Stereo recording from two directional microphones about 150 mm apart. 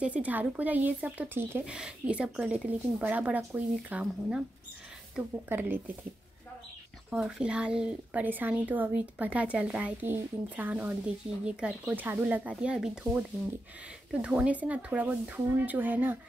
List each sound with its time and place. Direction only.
0.0 s speech: 10° right (ahead or behind)
5.5 s speech: 15° right (ahead or behind)
7.1 s speech: 5° right (ahead or behind)
14.2 s speech: 10° right (ahead or behind)